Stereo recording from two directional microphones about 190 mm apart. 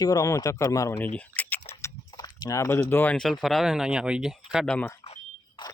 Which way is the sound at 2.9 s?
10° left (ahead or behind).